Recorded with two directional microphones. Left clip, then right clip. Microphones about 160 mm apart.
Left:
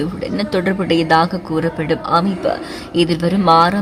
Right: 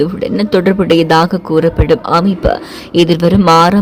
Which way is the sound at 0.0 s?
35° right (ahead or behind).